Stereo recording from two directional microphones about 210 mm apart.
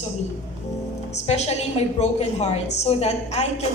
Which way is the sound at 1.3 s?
30° left (ahead or behind).